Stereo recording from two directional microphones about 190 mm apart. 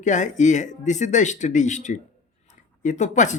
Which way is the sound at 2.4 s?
40° left (ahead or behind).